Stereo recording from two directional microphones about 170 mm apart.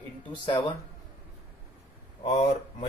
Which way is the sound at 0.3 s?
30° left (ahead or behind).